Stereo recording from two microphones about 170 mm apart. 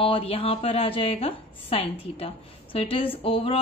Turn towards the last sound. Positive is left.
turn(degrees=35)  # may be behind; listen again after turning